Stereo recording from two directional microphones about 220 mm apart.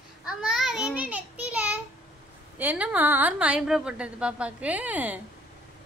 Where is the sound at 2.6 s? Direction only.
5° right (ahead or behind).